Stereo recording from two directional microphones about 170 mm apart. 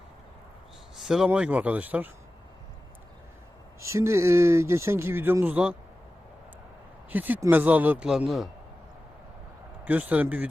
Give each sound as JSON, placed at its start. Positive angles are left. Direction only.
{"t": 0.9, "sound": "speech", "side_deg": 0}
{"t": 3.8, "sound": "speech", "side_deg": -15}
{"t": 7.1, "sound": "speech", "side_deg": -10}
{"t": 9.8, "sound": "speech", "side_deg": -10}